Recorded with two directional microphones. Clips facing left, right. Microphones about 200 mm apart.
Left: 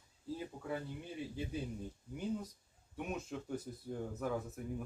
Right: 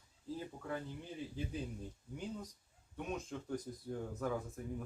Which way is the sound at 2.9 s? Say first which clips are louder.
Left 1 dB; 10° left (ahead or behind).